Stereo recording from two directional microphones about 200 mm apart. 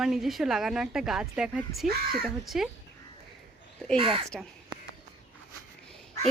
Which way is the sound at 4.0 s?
25° right (ahead or behind).